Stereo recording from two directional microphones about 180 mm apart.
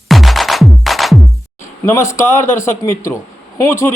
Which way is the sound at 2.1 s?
15° left (ahead or behind).